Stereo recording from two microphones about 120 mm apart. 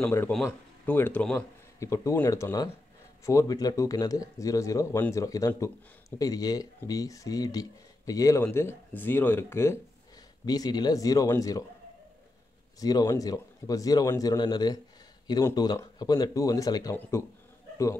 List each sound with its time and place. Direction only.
0.3 s speech: centre (ahead or behind)
0.8 s speech: 15° left (ahead or behind)
1.8 s speech: 25° left (ahead or behind)
8.5 s speech: 15° left (ahead or behind)
10.4 s a man's voice: 35° left (ahead or behind)
12.7 s a man's voice: 35° left (ahead or behind)